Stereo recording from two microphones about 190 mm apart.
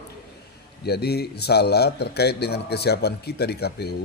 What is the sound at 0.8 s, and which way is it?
A man's voice, 55° left (ahead or behind).